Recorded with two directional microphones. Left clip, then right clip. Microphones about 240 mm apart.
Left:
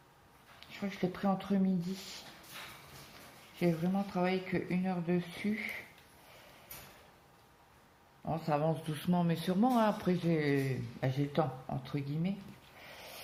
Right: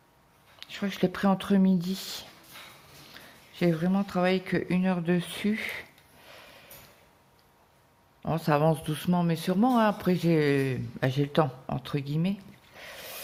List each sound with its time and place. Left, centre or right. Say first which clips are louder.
0.6 s speech: right 8 dB; right
3.6 s speech: right 6 dB; right
8.2 s speech: right 8 dB; right